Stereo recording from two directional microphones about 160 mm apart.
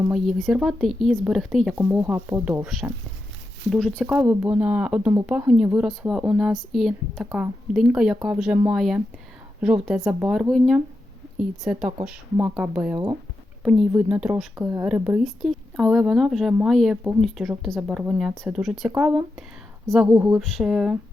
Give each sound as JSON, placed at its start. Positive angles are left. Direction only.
{"t": 0.1, "sound": "speech", "side_deg": 0}
{"t": 3.7, "sound": "speech", "side_deg": 0}
{"t": 14.5, "sound": "speech", "side_deg": -15}
{"t": 15.2, "sound": "speech", "side_deg": 0}
{"t": 20.4, "sound": "speech", "side_deg": 0}